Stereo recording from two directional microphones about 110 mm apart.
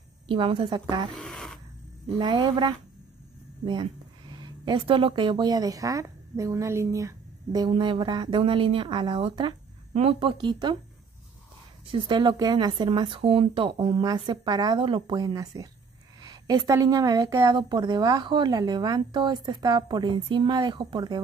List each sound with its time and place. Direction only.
0.3 s speech: 55° right (ahead or behind)
1.1 s a sound: 5° left (ahead or behind)
2.1 s speech: 45° right (ahead or behind)
7.7 s speech: 45° right (ahead or behind)
9.9 s speech: 65° right (ahead or behind)
10.3 s speech: 45° right (ahead or behind)
11.9 s speech: 45° right (ahead or behind)
13.2 s speech: 60° right (ahead or behind)
14.0 s speech: 40° right (ahead or behind)
14.8 s speech: 50° right (ahead or behind)
15.3 s a woman's voice: 35° right (ahead or behind)
17.6 s speech: 45° right (ahead or behind)